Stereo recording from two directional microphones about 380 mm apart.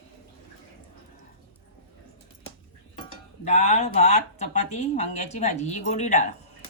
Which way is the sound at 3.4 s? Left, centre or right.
Centre.